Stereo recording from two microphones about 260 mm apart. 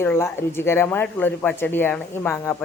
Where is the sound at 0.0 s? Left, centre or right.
Centre.